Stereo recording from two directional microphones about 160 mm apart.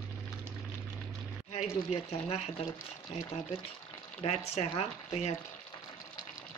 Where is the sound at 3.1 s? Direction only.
45° left (ahead or behind).